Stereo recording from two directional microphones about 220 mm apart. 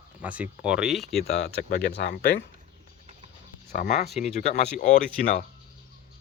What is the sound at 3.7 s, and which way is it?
Speech, 35° left (ahead or behind).